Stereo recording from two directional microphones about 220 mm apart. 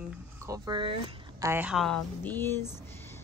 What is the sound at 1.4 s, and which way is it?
A woman's voice, 5° right (ahead or behind).